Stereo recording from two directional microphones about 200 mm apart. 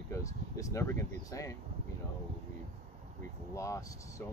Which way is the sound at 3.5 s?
15° left (ahead or behind).